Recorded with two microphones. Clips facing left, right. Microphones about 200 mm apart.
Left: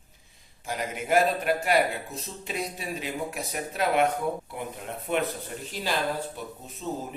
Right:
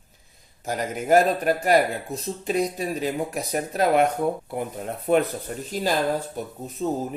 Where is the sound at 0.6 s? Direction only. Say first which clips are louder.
Right 5 dB; 40° right (ahead or behind).